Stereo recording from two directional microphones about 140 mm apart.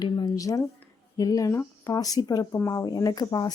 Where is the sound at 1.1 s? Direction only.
25° left (ahead or behind).